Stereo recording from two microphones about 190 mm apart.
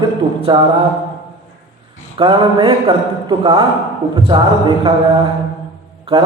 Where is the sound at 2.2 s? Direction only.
25° right (ahead or behind).